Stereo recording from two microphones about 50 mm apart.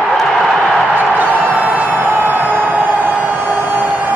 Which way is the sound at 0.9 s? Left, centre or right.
Right.